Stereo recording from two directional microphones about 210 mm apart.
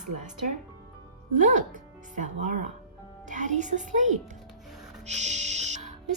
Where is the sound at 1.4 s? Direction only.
35° right (ahead or behind).